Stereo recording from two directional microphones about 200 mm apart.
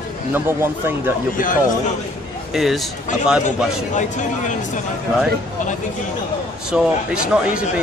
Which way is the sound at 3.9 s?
40° left (ahead or behind).